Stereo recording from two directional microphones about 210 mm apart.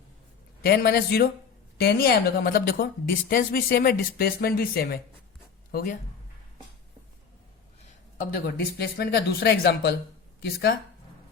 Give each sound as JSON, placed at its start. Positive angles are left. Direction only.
{"t": 0.6, "sound": "a woman's voice", "side_deg": 45}
{"t": 8.5, "sound": "a woman's voice", "side_deg": 50}